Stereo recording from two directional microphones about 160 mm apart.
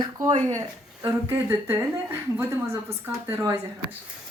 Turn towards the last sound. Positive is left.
turn(degrees=-20)  # may be behind; listen again after turning